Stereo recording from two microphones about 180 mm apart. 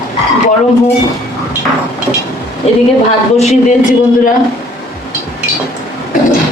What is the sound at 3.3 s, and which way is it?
Speech, 35° left (ahead or behind).